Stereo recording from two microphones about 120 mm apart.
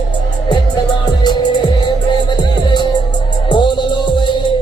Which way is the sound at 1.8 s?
40° left (ahead or behind).